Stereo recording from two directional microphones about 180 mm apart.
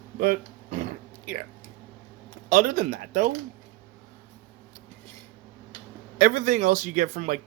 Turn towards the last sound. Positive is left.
turn(degrees=-40)  # may be behind; listen again after turning